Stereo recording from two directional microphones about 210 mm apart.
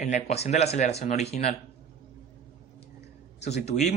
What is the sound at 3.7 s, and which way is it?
Speech, 30° left (ahead or behind).